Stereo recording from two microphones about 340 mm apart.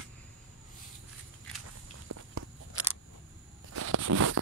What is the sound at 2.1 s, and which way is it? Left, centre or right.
Walk, right.